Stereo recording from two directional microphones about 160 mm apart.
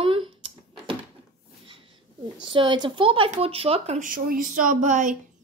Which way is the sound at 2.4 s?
30° right (ahead or behind).